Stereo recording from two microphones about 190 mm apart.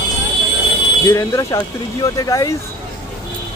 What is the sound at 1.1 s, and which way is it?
Speech, 15° left (ahead or behind).